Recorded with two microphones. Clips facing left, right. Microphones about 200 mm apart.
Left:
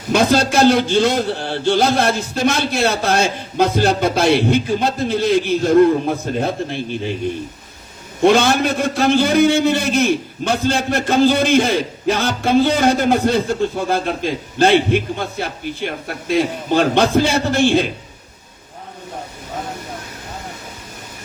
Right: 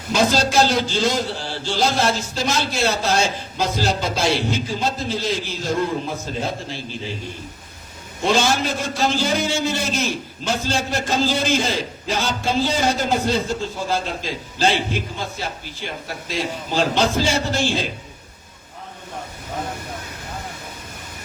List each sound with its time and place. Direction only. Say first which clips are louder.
0.1 s a man's voice: left 4 dB; 60° left (ahead or behind)
8.2 s a man's voice: left 6 dB; 60° left (ahead or behind)